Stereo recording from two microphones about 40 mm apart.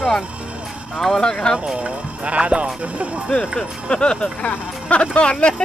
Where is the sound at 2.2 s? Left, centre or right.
Right.